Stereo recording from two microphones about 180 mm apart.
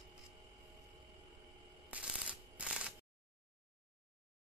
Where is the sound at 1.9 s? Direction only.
5° right (ahead or behind).